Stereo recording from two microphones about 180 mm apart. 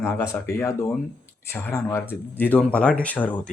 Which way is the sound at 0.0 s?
15° left (ahead or behind).